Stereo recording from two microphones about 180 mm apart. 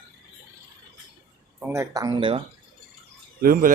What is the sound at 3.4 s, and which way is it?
Speech, 50° right (ahead or behind).